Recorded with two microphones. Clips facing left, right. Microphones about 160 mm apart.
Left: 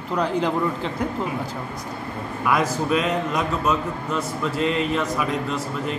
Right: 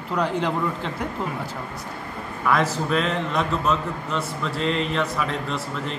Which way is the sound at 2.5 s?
10° left (ahead or behind).